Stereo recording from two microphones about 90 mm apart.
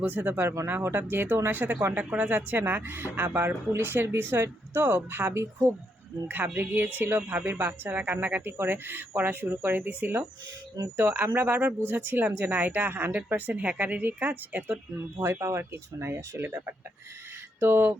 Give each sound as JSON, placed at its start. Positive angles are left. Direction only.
{"t": 0.0, "sound": "speech", "side_deg": -20}